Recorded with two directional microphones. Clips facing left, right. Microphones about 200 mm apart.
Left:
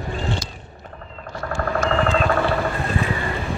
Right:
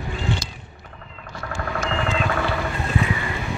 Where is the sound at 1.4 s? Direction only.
40° left (ahead or behind).